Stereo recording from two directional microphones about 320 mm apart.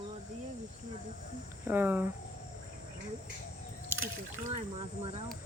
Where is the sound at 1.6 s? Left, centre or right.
Centre.